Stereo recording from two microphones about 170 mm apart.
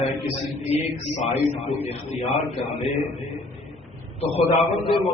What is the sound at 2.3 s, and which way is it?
Speech, 35° left (ahead or behind).